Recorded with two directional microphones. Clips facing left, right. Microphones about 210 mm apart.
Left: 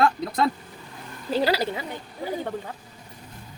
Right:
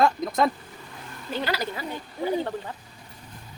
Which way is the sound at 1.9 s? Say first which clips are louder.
Right 4 dB; 10° left (ahead or behind).